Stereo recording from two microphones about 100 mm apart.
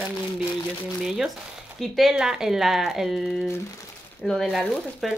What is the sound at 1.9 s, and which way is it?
Speech, 5° right (ahead or behind).